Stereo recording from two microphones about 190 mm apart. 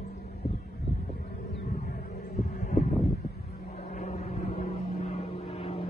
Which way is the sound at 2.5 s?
40° left (ahead or behind).